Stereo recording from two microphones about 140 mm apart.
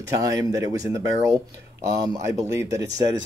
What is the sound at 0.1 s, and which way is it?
Speech, 25° right (ahead or behind).